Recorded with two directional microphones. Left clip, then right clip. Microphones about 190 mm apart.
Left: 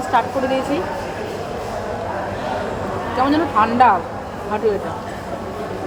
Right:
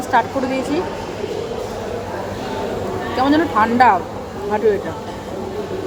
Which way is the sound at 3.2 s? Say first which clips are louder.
Right 1 dB; 25° right (ahead or behind).